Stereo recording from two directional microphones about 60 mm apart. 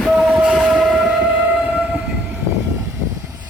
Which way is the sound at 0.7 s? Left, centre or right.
Centre.